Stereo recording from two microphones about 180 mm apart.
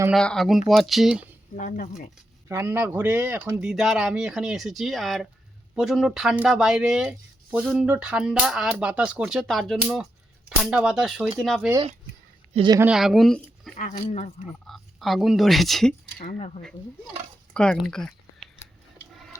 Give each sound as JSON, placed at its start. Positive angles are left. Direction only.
{"t": 0.1, "sound": "speech", "side_deg": 5}
{"t": 1.5, "sound": "speech", "side_deg": 50}
{"t": 2.5, "sound": "speech", "side_deg": -15}
{"t": 12.5, "sound": "speech", "side_deg": -25}
{"t": 12.8, "sound": "speech", "side_deg": -5}
{"t": 16.1, "sound": "speech", "side_deg": 50}
{"t": 17.5, "sound": "speech", "side_deg": 5}